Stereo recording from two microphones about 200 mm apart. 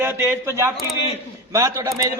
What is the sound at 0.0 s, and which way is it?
Speech, 10° right (ahead or behind).